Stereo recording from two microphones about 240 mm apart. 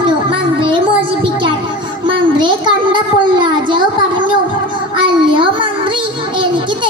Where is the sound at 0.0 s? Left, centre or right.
Right.